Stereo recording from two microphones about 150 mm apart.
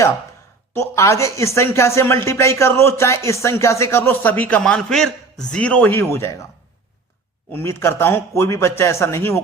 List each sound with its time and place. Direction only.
0.7 s speech: 20° left (ahead or behind)
7.5 s speech: 15° left (ahead or behind)